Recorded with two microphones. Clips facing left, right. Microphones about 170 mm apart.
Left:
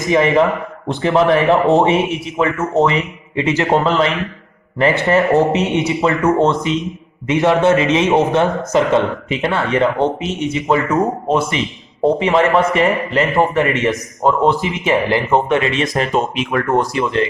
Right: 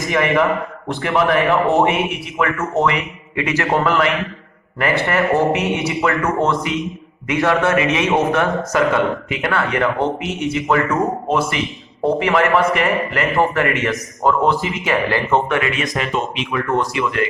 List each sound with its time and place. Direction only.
0.1 s a man's voice: 25° left (ahead or behind)
16.1 s speech: 45° left (ahead or behind)
16.9 s a man's voice: 30° left (ahead or behind)